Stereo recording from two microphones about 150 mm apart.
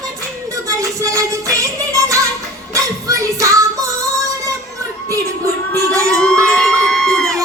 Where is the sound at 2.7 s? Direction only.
20° right (ahead or behind).